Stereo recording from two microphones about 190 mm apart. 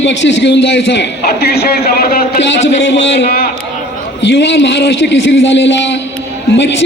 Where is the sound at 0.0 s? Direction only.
70° left (ahead or behind); by 3.5 s 55° left (ahead or behind).